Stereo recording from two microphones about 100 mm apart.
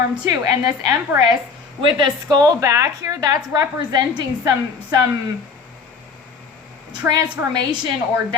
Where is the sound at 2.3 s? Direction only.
40° right (ahead or behind).